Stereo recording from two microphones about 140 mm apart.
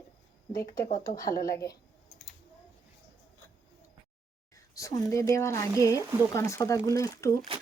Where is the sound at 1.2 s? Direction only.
25° left (ahead or behind).